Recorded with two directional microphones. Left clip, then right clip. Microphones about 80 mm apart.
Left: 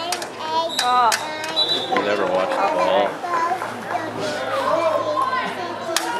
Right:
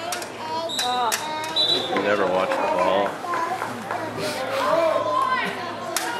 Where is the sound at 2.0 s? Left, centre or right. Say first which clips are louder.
Right 2 dB; right.